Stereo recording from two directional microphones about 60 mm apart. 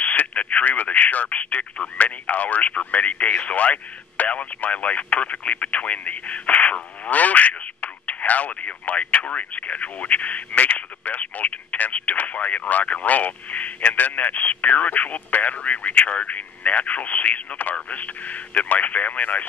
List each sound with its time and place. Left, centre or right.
0.0 s speech: left